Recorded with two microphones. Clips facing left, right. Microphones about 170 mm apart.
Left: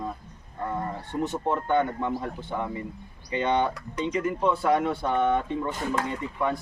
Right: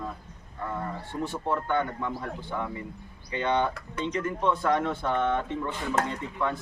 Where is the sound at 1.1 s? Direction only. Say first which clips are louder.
Left 3 dB; 20° left (ahead or behind).